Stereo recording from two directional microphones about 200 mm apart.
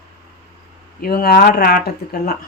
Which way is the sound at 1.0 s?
50° left (ahead or behind).